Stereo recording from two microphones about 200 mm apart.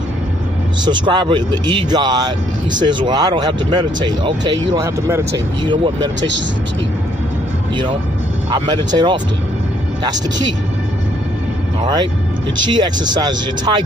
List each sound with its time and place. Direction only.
0.8 s speech: 20° right (ahead or behind)
7.7 s speech: 25° right (ahead or behind)
11.8 s speech: 20° right (ahead or behind)